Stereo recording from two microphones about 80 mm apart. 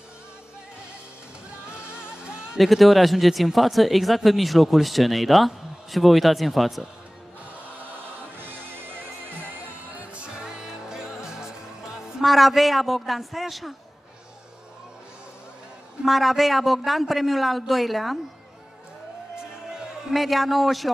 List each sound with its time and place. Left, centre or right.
2.0 s music: centre
2.6 s speech: centre
9.9 s music: centre
16.0 s speech: centre
20.1 s speech: centre